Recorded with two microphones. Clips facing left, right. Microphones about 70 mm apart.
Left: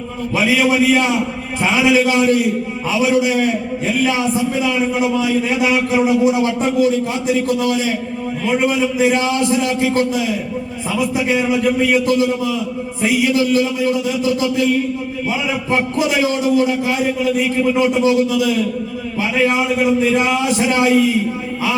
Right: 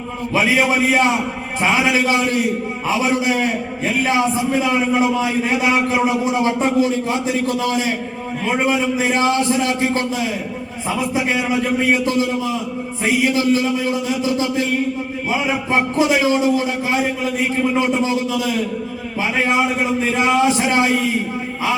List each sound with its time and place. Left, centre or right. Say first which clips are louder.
0.3 s a man's voice: left 1 dB; right
11.3 s a man's voice: left 3 dB; right